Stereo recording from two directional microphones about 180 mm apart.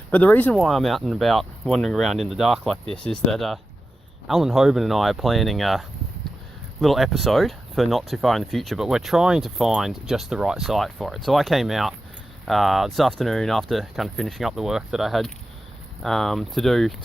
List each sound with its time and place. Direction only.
0.1 s speech: 10° left (ahead or behind)
6.8 s speech: centre (ahead or behind)